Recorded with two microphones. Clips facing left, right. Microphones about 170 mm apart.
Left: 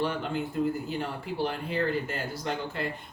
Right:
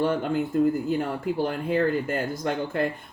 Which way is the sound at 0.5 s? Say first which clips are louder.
Right 8 dB; 45° right (ahead or behind).